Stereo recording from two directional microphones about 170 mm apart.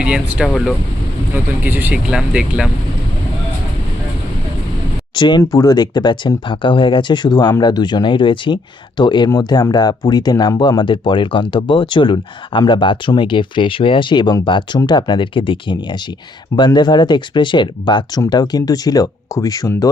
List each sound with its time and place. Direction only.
0.0 s speech: 5° right (ahead or behind)
5.1 s speech: 25° left (ahead or behind)